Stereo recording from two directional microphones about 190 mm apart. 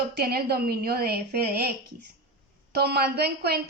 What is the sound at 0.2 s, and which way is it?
A woman's voice, 55° right (ahead or behind).